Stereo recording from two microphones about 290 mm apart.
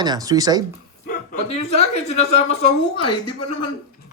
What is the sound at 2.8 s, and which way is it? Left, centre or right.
Speech, left.